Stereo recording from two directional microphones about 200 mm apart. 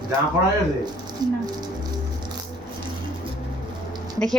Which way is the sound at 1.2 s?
20° right (ahead or behind).